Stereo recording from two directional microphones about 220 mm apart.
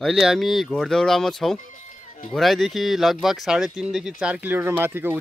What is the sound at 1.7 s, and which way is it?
Music, 35° left (ahead or behind).